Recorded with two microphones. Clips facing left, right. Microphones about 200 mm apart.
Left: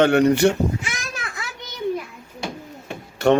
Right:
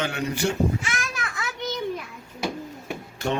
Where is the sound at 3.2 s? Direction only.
70° left (ahead or behind).